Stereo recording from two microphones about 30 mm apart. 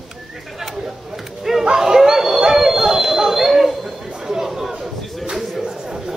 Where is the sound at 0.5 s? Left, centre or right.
Centre.